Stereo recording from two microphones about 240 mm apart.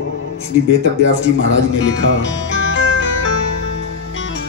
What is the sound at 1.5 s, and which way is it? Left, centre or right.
Music, left.